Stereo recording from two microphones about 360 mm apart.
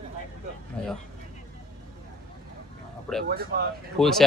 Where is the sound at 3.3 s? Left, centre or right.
Right.